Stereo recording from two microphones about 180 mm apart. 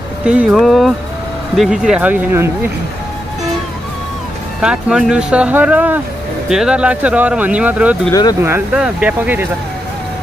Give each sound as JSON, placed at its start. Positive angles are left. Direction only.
{"t": 0.2, "sound": "speech", "side_deg": -5}
{"t": 4.6, "sound": "speech", "side_deg": -5}
{"t": 8.1, "sound": "speech", "side_deg": 20}
{"t": 8.4, "sound": "speech", "side_deg": -10}